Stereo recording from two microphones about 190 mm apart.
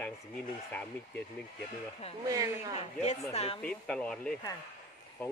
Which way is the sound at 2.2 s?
20° right (ahead or behind).